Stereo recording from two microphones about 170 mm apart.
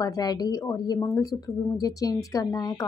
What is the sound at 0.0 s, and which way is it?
A woman's voice, 20° left (ahead or behind).